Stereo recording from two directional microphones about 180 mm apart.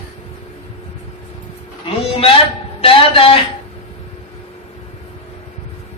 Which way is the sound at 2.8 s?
30° left (ahead or behind).